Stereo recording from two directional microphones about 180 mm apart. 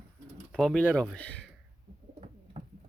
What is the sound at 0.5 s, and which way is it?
Speech, centre (ahead or behind).